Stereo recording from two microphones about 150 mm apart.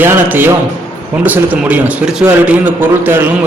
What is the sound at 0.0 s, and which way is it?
A man's voice, 15° right (ahead or behind).